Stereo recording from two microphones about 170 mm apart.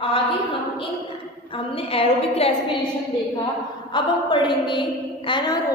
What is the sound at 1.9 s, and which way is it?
Speech, 35° left (ahead or behind).